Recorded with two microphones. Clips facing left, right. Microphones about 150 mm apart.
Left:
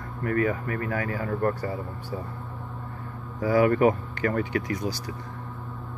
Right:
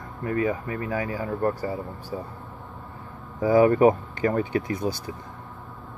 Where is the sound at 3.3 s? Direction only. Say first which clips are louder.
Right 3 dB; 20° right (ahead or behind).